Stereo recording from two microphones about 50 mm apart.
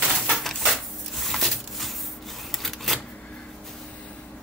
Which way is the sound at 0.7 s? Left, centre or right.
Centre.